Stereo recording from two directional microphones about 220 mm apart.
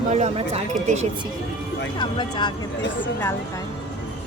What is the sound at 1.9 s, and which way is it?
Music, 20° left (ahead or behind).